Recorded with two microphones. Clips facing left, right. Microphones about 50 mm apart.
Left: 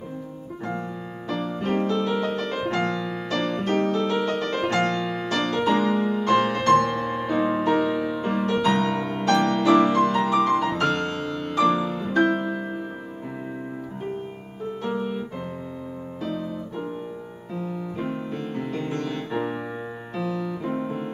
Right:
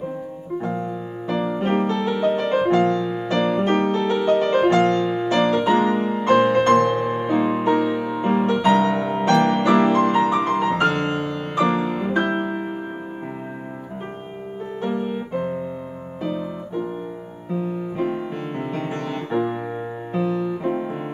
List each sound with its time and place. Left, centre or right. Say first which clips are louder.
1.5 s music: right 1 dB; right
2.7 s music: right 7 dB; centre
3.3 s music: right 5 dB; right
5.0 s music: right 6 dB; centre
5.3 s music: right 4 dB; right
9.1 s music: right 3 dB; right
15.0 s music: right 4 dB; right
17.6 s music: right 5 dB; centre
18.0 s music: right 5 dB; right